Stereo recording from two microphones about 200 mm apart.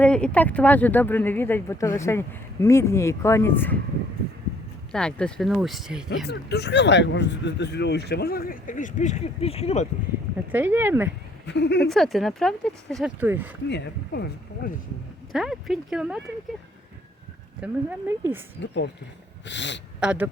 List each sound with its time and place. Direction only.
0.0 s speech: 5° left (ahead or behind)
4.9 s speech: 5° left (ahead or behind)
6.2 s speech: 55° left (ahead or behind); by 9.8 s 30° left (ahead or behind)
10.5 s speech: 10° right (ahead or behind)
11.4 s speech: 60° left (ahead or behind)
11.9 s speech: centre (ahead or behind)
13.7 s speech: 55° left (ahead or behind)
15.3 s speech: centre (ahead or behind)
17.6 s speech: 10° right (ahead or behind)
18.6 s speech: 60° left (ahead or behind)
20.0 s speech: 5° right (ahead or behind)